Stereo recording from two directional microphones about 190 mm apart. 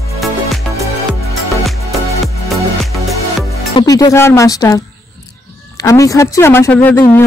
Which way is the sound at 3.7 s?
20° left (ahead or behind).